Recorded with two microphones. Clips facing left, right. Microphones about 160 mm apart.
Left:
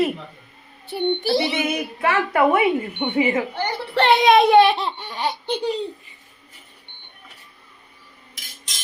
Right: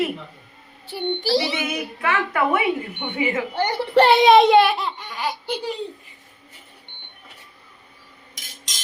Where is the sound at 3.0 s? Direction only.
25° left (ahead or behind).